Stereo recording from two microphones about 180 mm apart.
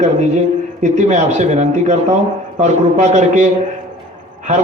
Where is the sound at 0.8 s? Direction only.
40° right (ahead or behind).